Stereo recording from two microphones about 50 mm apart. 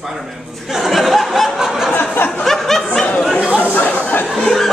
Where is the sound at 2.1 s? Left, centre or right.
Left.